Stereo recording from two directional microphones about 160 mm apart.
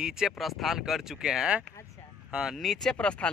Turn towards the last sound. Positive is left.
turn(degrees=5)  # may be behind; listen again after turning